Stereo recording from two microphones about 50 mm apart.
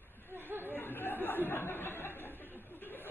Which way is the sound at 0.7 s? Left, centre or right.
Left.